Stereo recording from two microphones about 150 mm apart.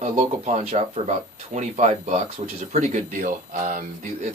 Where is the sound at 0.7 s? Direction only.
45° right (ahead or behind).